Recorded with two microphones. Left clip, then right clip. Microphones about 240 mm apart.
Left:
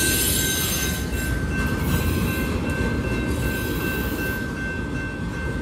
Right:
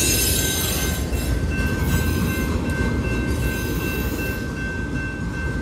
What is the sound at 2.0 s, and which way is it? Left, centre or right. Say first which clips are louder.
Train: right 1 dB; left.